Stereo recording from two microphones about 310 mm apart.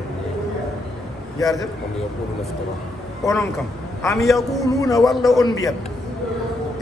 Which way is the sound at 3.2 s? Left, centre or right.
Centre.